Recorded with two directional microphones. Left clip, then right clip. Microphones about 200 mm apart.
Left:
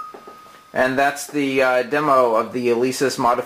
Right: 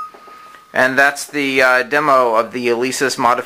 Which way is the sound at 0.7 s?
25° right (ahead or behind).